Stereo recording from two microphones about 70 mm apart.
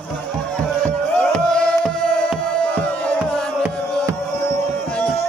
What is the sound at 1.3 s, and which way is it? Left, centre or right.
Music, centre.